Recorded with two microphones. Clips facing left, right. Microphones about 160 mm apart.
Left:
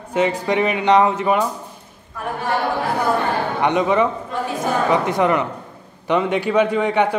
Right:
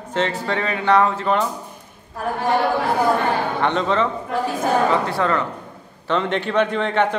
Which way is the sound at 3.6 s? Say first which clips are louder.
Left 5 dB; 15° left (ahead or behind).